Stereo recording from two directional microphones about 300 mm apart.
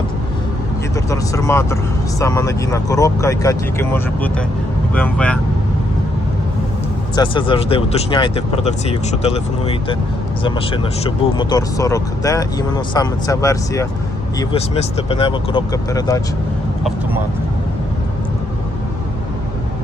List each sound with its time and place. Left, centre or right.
1.1 s speech: centre
7.2 s speech: centre
10.4 s speech: centre